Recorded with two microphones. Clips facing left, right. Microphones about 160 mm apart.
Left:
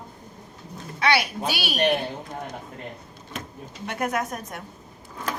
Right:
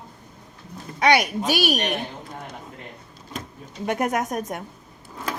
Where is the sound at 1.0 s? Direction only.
50° right (ahead or behind).